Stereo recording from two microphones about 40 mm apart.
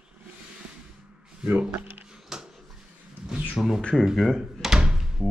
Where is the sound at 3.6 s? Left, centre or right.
Centre.